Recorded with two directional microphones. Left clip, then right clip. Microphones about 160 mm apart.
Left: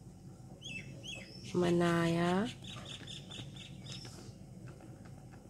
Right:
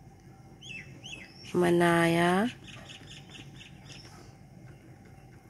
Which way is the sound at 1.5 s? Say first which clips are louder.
Right 7 dB; 25° right (ahead or behind).